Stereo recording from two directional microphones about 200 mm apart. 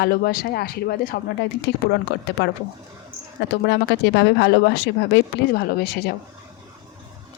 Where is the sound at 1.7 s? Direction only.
60° left (ahead or behind).